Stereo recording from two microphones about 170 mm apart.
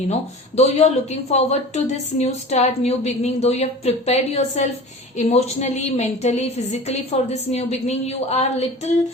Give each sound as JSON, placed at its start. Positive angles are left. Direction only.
{"t": 0.1, "sound": "a woman's voice", "side_deg": 40}